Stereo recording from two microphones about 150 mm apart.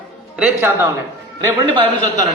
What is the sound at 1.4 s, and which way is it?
Speech, 30° right (ahead or behind).